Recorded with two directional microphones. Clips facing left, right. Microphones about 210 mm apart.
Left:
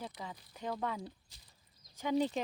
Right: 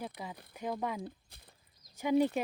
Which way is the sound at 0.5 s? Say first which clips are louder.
Right 2 dB; 10° right (ahead or behind).